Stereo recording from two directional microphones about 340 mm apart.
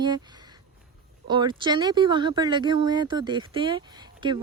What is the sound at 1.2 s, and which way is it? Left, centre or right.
Speech, centre.